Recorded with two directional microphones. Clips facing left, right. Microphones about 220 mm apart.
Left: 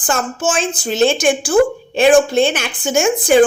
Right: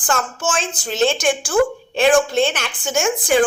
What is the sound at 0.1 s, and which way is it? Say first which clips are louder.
A woman's voice: left 3 dB; 10° left (ahead or behind).